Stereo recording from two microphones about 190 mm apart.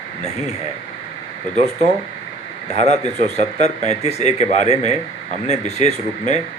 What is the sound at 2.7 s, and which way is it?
Speech, 35° left (ahead or behind).